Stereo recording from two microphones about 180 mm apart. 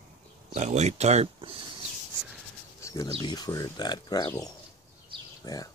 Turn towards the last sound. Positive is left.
turn(degrees=20)  # may be behind; listen again after turning